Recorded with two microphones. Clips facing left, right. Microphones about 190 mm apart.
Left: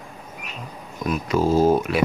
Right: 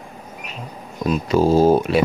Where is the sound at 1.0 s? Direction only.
30° right (ahead or behind).